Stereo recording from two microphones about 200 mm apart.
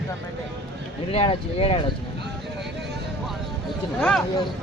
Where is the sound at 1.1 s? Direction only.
30° left (ahead or behind).